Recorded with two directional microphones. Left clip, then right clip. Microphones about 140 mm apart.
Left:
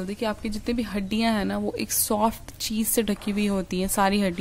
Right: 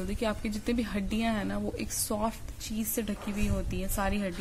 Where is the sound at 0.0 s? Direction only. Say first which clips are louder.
Left 4 dB; 20° left (ahead or behind).